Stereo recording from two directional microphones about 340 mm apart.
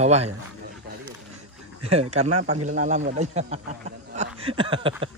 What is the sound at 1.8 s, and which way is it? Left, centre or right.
Speech, centre.